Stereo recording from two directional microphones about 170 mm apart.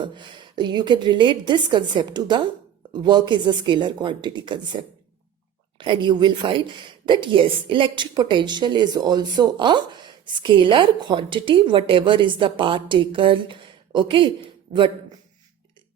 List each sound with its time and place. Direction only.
0.0 s a woman's voice: 25° right (ahead or behind)